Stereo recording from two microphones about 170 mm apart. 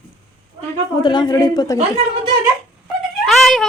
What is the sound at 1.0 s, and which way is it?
Speech, 25° left (ahead or behind).